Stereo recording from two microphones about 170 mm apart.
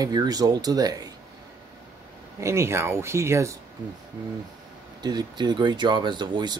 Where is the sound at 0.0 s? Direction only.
25° right (ahead or behind).